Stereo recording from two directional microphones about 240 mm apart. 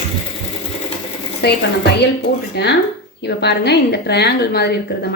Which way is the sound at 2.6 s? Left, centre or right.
Left.